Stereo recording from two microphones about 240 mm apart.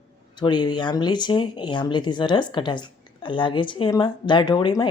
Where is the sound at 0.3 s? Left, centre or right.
Centre.